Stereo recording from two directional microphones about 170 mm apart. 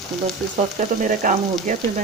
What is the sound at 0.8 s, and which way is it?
Speech, 50° right (ahead or behind).